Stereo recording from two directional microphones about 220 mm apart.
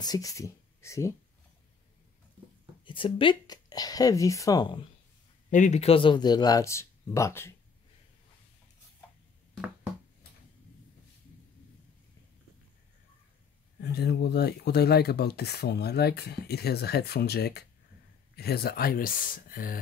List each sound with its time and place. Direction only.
0.0 s speech: 15° left (ahead or behind)
2.8 s speech: 25° left (ahead or behind)
5.5 s speech: 35° left (ahead or behind); by 7.5 s 10° left (ahead or behind)
13.7 s speech: 50° left (ahead or behind)